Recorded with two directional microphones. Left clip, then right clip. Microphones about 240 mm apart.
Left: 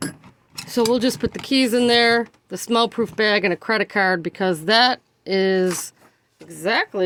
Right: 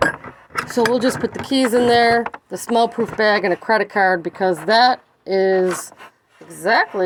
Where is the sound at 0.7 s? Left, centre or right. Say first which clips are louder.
Right 2 dB; left.